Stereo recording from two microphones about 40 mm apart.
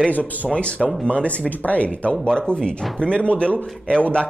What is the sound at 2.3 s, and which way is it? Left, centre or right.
Speech, left.